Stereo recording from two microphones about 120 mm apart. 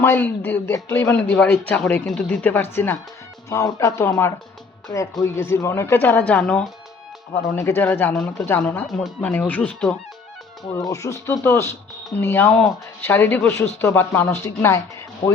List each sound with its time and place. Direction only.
0.0 s speech: 15° left (ahead or behind)
8.1 s speech: 5° left (ahead or behind)
8.4 s speech: 20° left (ahead or behind)
10.8 s speech: 25° left (ahead or behind)